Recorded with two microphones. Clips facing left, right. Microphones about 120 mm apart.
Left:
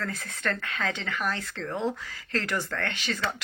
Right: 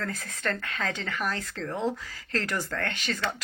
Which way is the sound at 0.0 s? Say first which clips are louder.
Even; 40° right (ahead or behind).